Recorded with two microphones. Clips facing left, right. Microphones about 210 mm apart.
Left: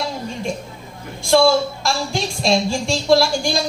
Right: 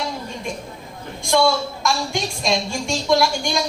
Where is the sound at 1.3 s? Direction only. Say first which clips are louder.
Left 4 dB; 30° left (ahead or behind).